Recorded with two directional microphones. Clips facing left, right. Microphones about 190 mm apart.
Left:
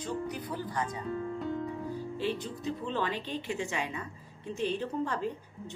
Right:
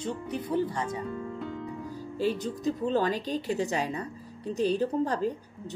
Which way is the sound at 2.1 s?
40° right (ahead or behind).